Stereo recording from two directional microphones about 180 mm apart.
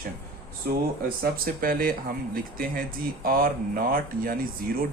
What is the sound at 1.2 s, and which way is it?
Speech, 55° right (ahead or behind).